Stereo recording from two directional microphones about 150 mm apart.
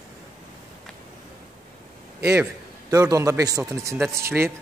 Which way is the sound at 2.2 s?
20° right (ahead or behind).